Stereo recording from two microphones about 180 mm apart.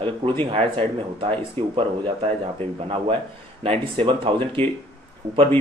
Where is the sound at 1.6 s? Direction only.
10° left (ahead or behind).